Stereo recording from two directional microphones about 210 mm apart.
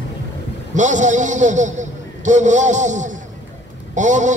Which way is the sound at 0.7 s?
35° right (ahead or behind).